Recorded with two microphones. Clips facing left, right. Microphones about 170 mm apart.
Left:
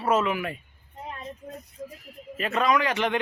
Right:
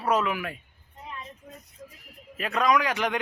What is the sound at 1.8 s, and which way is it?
Speech, 40° left (ahead or behind).